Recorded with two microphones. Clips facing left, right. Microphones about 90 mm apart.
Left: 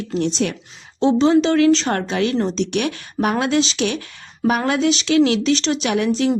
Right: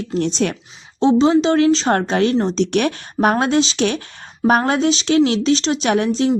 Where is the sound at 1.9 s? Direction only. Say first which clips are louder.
Right 4 dB; 35° right (ahead or behind).